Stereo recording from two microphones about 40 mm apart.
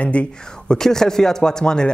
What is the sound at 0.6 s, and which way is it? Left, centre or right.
Speech, centre.